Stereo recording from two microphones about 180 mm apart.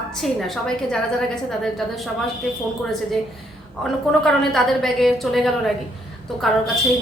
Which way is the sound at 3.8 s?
Centre (ahead or behind).